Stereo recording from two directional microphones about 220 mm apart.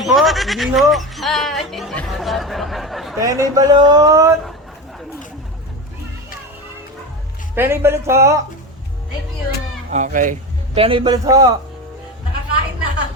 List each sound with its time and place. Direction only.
0.0 s speech: centre (ahead or behind)
3.2 s speech: 15° right (ahead or behind)
7.5 s speech: 10° right (ahead or behind)
9.9 s speech: 35° right (ahead or behind)
10.8 s a man's voice: 25° right (ahead or behind)